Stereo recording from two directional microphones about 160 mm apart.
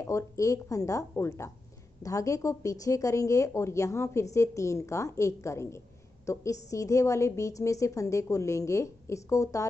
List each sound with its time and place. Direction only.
0.0 s speech: 20° left (ahead or behind)